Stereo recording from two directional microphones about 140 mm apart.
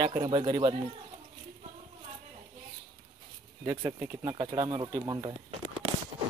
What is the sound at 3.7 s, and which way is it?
Speech, 25° right (ahead or behind).